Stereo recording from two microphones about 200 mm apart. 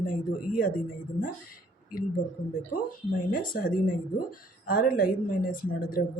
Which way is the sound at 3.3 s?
45° left (ahead or behind).